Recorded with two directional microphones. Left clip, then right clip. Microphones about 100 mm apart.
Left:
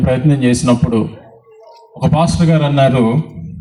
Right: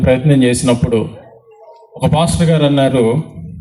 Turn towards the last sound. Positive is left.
turn(degrees=-35)  # may be behind; listen again after turning